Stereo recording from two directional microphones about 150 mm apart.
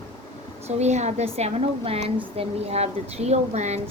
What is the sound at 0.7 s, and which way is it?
A woman's voice, 45° right (ahead or behind).